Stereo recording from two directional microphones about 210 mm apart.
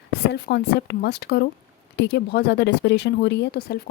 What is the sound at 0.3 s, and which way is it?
Speech, 50° left (ahead or behind).